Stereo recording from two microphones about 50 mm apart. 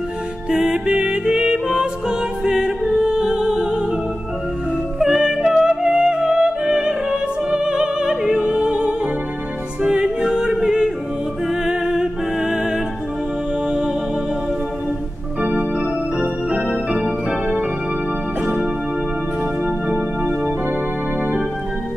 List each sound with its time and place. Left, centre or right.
0.5 s music: centre
4.9 s music: centre
9.8 s yodeling: centre
11.6 s music: centre
16.2 s organ: centre
18.4 s music: right
19.9 s music: right